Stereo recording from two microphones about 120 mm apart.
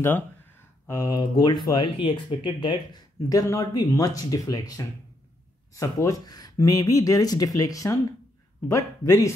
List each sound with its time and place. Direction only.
0.8 s speech: 25° left (ahead or behind)